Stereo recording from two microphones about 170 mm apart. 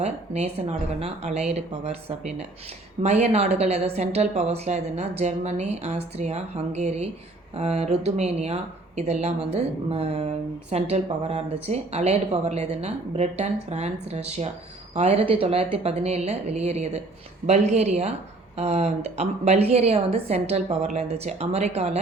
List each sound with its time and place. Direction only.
0.0 s speech: 40° right (ahead or behind)